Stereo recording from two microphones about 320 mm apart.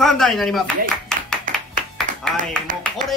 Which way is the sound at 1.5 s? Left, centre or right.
Right.